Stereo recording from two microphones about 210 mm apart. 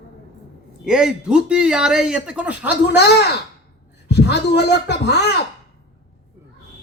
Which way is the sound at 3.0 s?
50° left (ahead or behind).